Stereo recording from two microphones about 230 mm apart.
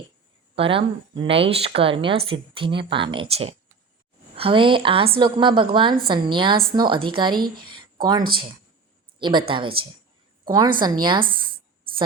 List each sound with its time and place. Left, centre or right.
0.5 s speech: right
7.7 s a sound: centre
9.1 s a woman's voice: right